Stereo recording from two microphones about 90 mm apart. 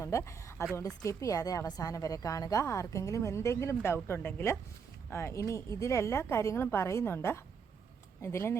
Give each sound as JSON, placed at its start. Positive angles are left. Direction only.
{"t": 0.0, "sound": "a woman's voice", "side_deg": 35}